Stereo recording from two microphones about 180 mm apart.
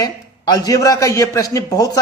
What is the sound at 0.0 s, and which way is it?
A man's voice, 20° left (ahead or behind).